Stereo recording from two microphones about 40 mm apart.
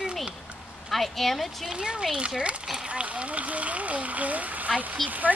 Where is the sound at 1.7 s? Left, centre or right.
Right.